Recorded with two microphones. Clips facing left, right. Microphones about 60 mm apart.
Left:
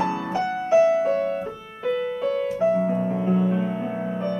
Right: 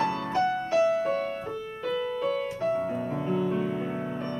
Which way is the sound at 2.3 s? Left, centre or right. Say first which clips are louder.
Left 9 dB; centre.